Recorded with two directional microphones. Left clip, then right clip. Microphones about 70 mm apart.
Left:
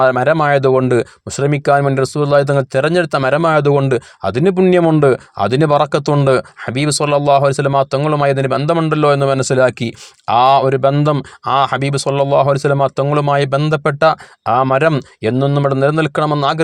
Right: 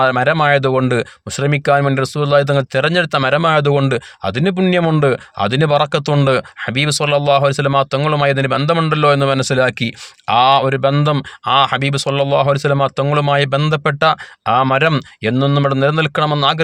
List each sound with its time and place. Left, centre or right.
0.0 s speech: left
4.3 s speech: left